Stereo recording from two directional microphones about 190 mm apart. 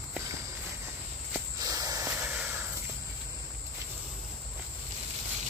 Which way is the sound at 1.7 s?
20° right (ahead or behind).